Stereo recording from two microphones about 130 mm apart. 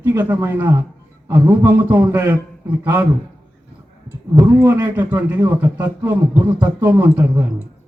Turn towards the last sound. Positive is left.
turn(degrees=-15)  # may be behind; listen again after turning